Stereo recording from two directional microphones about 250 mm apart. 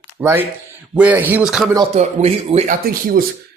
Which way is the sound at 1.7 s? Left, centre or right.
Right.